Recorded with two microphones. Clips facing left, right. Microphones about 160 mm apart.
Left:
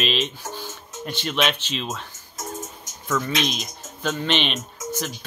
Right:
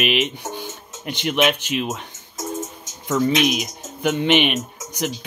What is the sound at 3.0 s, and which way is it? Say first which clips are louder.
Speech: right 6 dB; 20° right (ahead or behind).